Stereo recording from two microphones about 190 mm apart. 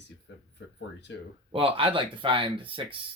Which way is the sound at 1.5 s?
30° right (ahead or behind).